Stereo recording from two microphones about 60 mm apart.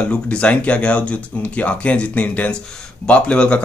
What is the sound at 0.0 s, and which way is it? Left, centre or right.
Speech, left.